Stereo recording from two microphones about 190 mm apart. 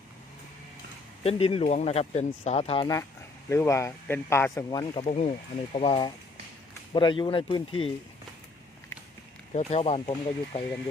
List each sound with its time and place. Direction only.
1.2 s speech: 30° left (ahead or behind)
5.0 s speech: 35° left (ahead or behind)
9.6 s speech: 35° left (ahead or behind)